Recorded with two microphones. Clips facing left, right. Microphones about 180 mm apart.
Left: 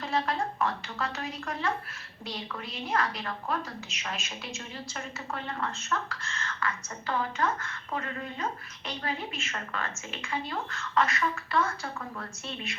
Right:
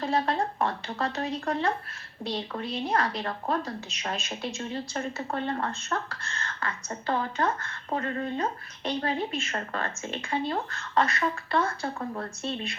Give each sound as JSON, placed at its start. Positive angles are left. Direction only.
{"t": 0.0, "sound": "speech", "side_deg": -35}